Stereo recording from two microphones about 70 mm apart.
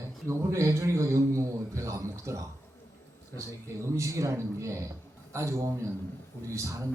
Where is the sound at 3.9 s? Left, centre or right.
Right.